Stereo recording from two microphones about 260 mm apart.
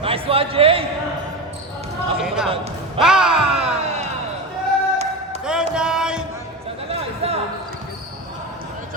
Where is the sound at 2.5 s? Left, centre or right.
Right.